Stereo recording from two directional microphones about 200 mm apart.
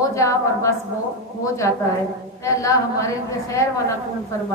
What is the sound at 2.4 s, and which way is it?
A woman's voice, 15° left (ahead or behind).